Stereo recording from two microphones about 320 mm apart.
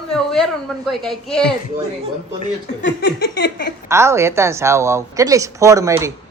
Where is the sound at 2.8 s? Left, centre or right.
Left.